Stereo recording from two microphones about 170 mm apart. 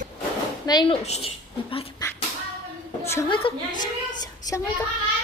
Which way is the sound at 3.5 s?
30° left (ahead or behind).